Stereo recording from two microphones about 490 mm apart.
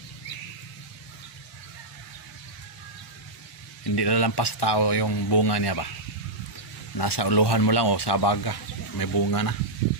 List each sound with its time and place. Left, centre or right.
3.9 s speech: left
7.0 s speech: left